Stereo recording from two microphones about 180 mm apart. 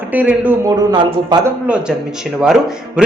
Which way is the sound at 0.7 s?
25° right (ahead or behind).